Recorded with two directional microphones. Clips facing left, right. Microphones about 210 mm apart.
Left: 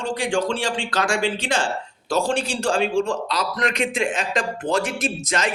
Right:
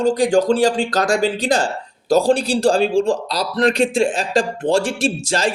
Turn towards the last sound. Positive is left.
turn(degrees=-30)  # may be behind; listen again after turning